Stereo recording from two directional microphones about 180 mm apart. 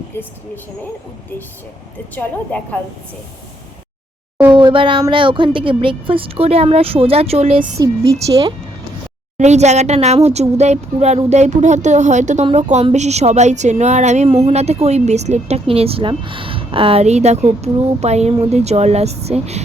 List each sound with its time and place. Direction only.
2.1 s a woman's voice: 10° left (ahead or behind)
4.5 s speech: 30° right (ahead or behind)
7.8 s speech: 20° right (ahead or behind)
9.4 s a woman's voice: 40° right (ahead or behind)